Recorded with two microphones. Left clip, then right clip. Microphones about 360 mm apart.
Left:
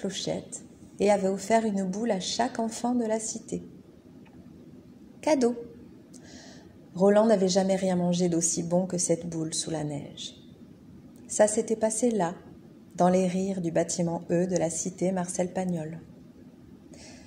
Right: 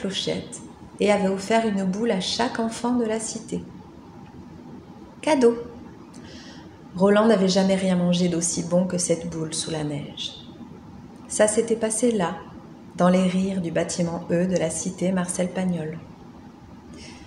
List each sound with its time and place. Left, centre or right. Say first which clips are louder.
0.0 s a woman's voice: right 5 dB; centre
5.2 s a woman's voice: right 5 dB; centre
7.0 s a woman's voice: right 3 dB; centre
11.3 s a woman's voice: right 4 dB; centre